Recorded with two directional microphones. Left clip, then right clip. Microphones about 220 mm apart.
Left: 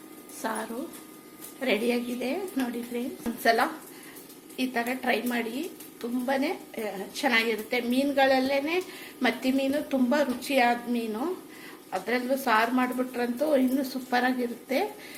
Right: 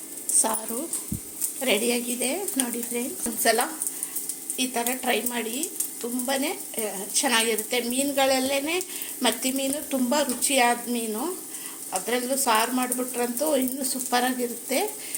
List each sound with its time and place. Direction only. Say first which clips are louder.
0.4 s speech: right 2 dB; 20° right (ahead or behind)
1.6 s speech: right 2 dB; 10° right (ahead or behind)